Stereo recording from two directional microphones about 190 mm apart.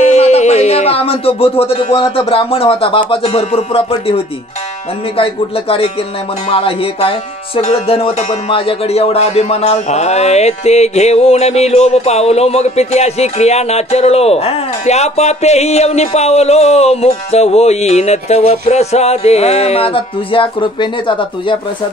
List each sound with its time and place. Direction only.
0.0 s a man's voice: 35° left (ahead or behind)